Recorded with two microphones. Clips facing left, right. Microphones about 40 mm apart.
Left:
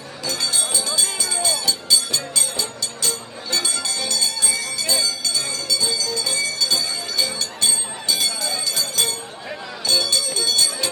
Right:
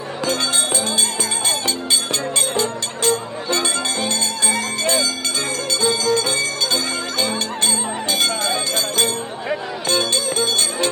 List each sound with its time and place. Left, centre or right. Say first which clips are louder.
0.3 s music: right 4 dB; right